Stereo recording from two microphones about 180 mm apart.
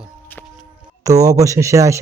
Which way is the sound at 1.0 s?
20° right (ahead or behind).